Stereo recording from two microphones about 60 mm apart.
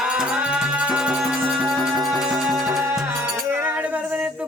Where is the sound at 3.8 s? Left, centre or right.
Right.